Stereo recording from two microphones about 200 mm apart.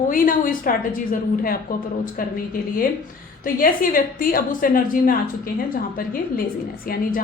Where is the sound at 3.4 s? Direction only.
45° left (ahead or behind).